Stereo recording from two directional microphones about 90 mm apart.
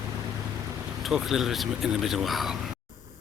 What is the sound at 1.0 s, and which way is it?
Speech, 5° right (ahead or behind).